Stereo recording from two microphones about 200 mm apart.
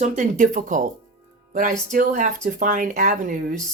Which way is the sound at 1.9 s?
40° right (ahead or behind).